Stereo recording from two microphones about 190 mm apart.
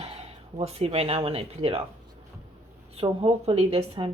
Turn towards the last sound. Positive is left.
turn(degrees=-30)  # may be behind; listen again after turning